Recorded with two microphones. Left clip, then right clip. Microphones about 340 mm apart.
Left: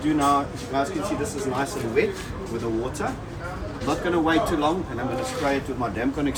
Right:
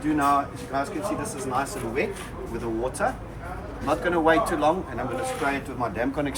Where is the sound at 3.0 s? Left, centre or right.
Centre.